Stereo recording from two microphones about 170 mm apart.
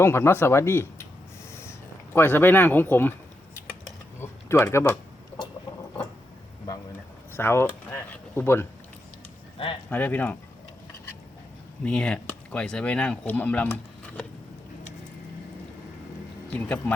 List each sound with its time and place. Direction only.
0.0 s speech: 15° left (ahead or behind)
2.1 s speech: 10° left (ahead or behind)
4.2 s a sound: 15° left (ahead or behind)
7.3 s speech: 15° left (ahead or behind)
9.6 s speech: 30° left (ahead or behind)
9.9 s speech: 10° left (ahead or behind)
11.8 s speech: 5° left (ahead or behind)
16.5 s speech: 10° left (ahead or behind)